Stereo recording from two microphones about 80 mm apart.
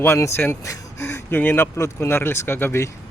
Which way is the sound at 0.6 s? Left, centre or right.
Left.